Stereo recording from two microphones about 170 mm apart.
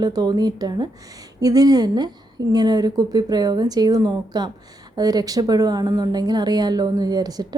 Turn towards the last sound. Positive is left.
turn(degrees=-25)  # may be behind; listen again after turning